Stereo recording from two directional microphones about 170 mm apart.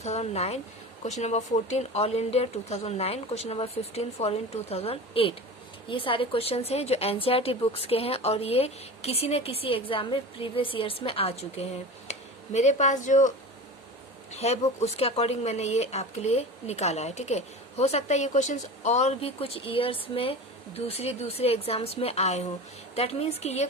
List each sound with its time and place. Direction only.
0.0 s speech: 40° left (ahead or behind)
14.3 s speech: 40° left (ahead or behind)